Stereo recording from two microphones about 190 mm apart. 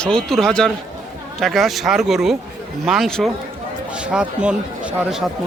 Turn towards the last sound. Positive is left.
turn(degrees=-5)  # may be behind; listen again after turning